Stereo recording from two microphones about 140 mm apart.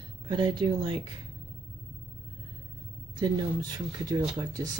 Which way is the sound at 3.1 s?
30° right (ahead or behind).